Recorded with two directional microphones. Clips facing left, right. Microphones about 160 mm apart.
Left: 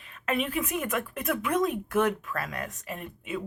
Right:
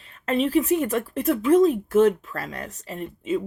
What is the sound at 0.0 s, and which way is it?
A woman's voice, 30° right (ahead or behind).